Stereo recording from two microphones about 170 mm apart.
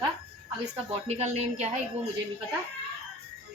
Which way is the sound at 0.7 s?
40° right (ahead or behind).